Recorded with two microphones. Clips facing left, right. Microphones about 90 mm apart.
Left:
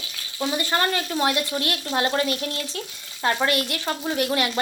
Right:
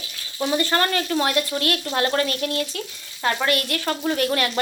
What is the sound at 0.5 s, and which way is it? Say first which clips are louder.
Speech: right 3 dB; 15° left (ahead or behind).